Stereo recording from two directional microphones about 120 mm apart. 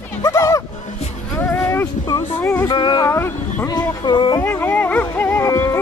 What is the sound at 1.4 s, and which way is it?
Music, 20° left (ahead or behind).